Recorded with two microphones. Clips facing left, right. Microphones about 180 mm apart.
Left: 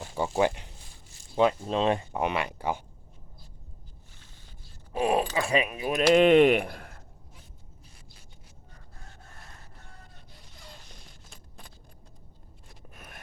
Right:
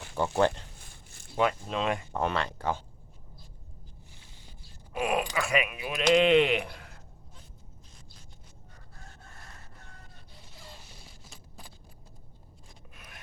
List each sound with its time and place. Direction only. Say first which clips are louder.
0.3 s speech: even; 15° left (ahead or behind)
1.4 s speech: left 4 dB; 30° left (ahead or behind)
2.1 s speech: left 1 dB; 15° left (ahead or behind)
4.9 s speech: left 4 dB; 30° left (ahead or behind)
6.1 s speech: left 4 dB; 50° left (ahead or behind)
10.6 s a sound: even; centre (ahead or behind)
12.9 s a sound: left 5 dB; 45° left (ahead or behind)